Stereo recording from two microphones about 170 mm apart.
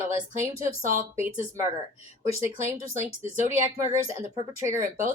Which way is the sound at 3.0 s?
45° right (ahead or behind).